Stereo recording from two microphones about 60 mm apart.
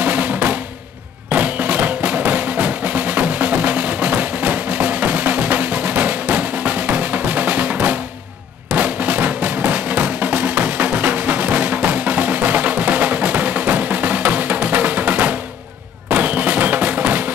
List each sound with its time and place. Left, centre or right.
0.0 s drum: right
1.3 s music: right
8.7 s drum: right